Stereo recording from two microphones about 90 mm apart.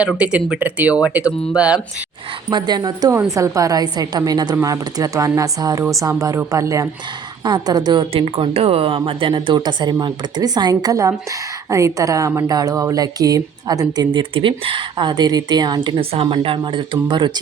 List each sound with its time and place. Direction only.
0.0 s speech: 10° right (ahead or behind)
2.5 s speech: 50° right (ahead or behind)
3.2 s a woman's voice: 35° right (ahead or behind)
7.4 s speech: 50° right (ahead or behind)
8.1 s speech: 90° right; by 14.2 s 50° right (ahead or behind)
14.2 s speech: 75° right (ahead or behind); by 16.0 s 50° right (ahead or behind)
16.0 s speech: 80° right; by 17.4 s 55° right (ahead or behind)